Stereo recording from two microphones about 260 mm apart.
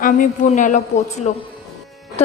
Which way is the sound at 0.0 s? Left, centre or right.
Left.